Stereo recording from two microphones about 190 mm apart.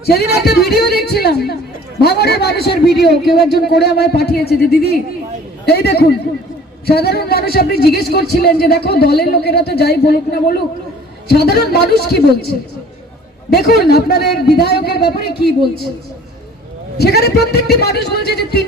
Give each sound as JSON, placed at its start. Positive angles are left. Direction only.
{"t": 0.0, "sound": "a man's voice", "side_deg": 60}
{"t": 13.5, "sound": "a man's voice", "side_deg": 60}
{"t": 17.0, "sound": "a man's voice", "side_deg": 55}